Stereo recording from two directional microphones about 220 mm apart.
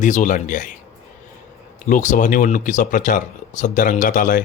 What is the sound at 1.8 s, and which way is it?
Speech, 35° left (ahead or behind).